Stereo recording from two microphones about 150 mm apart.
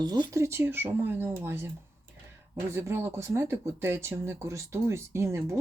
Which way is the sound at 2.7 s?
15° right (ahead or behind).